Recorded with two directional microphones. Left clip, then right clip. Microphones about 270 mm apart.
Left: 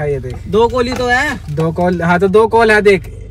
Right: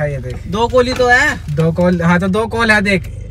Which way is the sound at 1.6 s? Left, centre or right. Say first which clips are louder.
Left 2 dB; centre.